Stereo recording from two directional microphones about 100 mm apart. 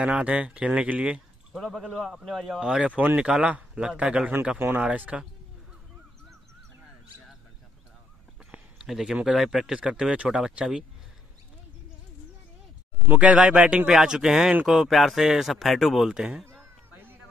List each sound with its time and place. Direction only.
0.0 s a man's voice: 15° right (ahead or behind)
1.6 s a man's voice: centre (ahead or behind)
8.5 s speech: 5° right (ahead or behind)
13.1 s speech: 10° right (ahead or behind)
16.5 s a sound: 20° right (ahead or behind)